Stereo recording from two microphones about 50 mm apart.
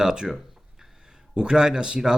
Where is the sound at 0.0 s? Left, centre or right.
Centre.